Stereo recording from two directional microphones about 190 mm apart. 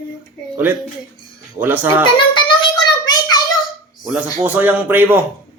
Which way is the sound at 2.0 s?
25° left (ahead or behind).